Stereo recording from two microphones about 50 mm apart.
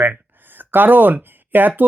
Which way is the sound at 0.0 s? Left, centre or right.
Right.